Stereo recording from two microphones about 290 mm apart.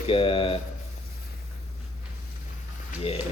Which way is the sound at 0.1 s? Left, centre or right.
Centre.